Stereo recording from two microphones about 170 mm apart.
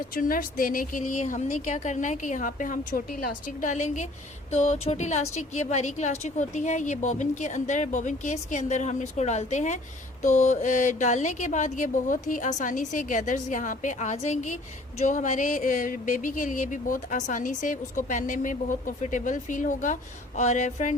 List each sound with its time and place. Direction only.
0.1 s speech: 55° left (ahead or behind)